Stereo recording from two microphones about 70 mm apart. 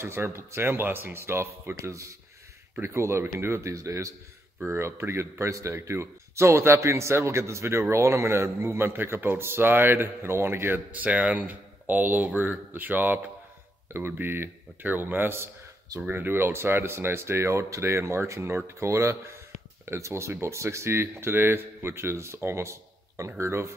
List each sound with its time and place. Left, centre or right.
0.0 s speech: right
10.9 s speech: right